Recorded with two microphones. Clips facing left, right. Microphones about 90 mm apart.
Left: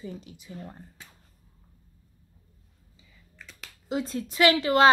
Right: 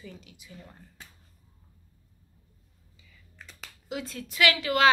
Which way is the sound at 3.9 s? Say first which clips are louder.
Left 6 dB; 30° left (ahead or behind).